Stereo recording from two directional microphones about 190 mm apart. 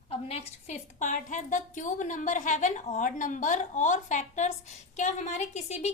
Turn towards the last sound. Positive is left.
turn(degrees=35)  # may be behind; listen again after turning